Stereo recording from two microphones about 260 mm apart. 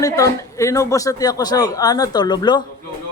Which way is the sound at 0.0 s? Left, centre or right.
Centre.